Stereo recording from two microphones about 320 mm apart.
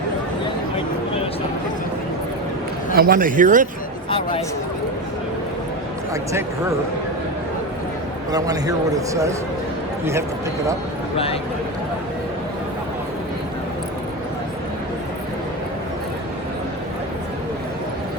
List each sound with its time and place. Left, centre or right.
2.9 s speech: right
4.1 s speech: centre
8.3 s a man's voice: centre